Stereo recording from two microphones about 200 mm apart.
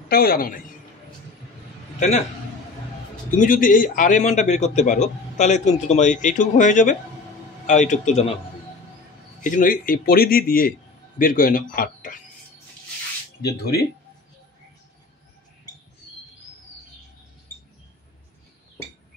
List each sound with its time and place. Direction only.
0.1 s a man's voice: 50° left (ahead or behind)
2.0 s a man's voice: 35° left (ahead or behind)
3.3 s a man's voice: 40° left (ahead or behind)
9.4 s a man's voice: 40° left (ahead or behind)